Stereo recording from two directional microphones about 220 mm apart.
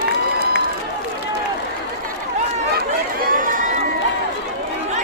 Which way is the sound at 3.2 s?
35° right (ahead or behind).